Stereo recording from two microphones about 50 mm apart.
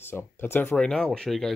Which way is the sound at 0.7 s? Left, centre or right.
Centre.